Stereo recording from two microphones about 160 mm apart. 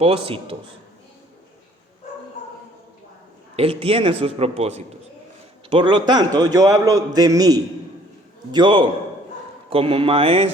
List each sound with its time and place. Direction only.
0.0 s a man's voice: 35° right (ahead or behind)
3.5 s a man's voice: 35° right (ahead or behind)